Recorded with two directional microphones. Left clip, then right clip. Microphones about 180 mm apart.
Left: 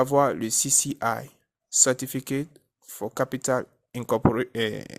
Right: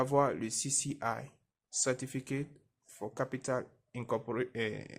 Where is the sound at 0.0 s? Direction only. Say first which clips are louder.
Left 8 dB; 40° left (ahead or behind).